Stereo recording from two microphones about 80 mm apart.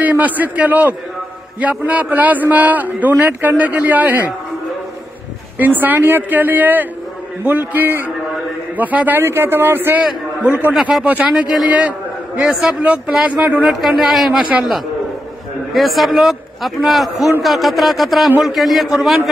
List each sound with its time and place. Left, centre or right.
0.0 s a man's voice: right
5.6 s a man's voice: right
10.7 s speech: centre
11.1 s a man's voice: centre
12.4 s a man's voice: centre
12.8 s a man's voice: centre
13.7 s a man's voice: centre
15.7 s a man's voice: centre